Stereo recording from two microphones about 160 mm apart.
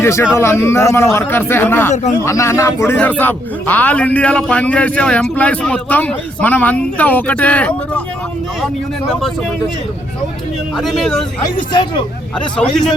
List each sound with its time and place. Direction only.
0.0 s speech: 15° left (ahead or behind)
10.8 s speech: centre (ahead or behind)
11.7 s speech: 25° left (ahead or behind)